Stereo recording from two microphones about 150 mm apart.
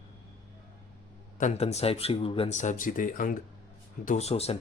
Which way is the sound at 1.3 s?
50° left (ahead or behind).